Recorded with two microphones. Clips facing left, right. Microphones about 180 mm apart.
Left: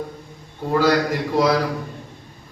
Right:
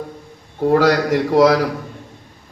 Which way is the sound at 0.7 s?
65° right (ahead or behind).